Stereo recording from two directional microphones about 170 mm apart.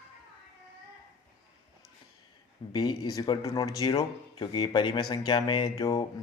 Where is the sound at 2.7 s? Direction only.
20° left (ahead or behind).